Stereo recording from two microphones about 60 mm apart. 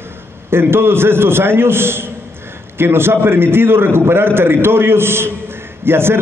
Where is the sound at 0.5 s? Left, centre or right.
Right.